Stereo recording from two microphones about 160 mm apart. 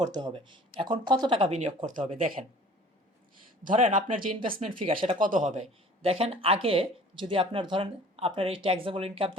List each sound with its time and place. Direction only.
0.1 s speech: 25° right (ahead or behind)
1.5 s speech: 45° right (ahead or behind)
2.2 s speech: 50° right (ahead or behind)
3.6 s speech: 55° right (ahead or behind)
4.9 s speech: 35° right (ahead or behind)
5.2 s speech: 55° right (ahead or behind)
6.0 s speech: 35° right (ahead or behind)